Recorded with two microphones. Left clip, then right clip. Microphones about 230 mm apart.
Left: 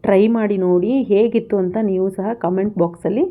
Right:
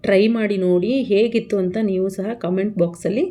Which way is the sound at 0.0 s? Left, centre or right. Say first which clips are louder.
Left 2 dB; centre.